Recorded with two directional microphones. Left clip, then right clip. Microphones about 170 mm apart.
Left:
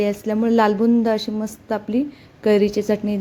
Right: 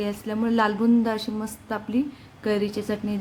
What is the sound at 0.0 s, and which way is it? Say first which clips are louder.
A woman's voice: left 7 dB; 30° left (ahead or behind).